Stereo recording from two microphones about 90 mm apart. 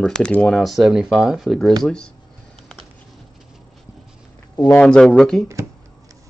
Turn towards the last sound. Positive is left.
turn(degrees=5)  # may be behind; listen again after turning